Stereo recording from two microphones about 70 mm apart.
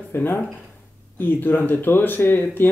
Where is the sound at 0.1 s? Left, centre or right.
Left.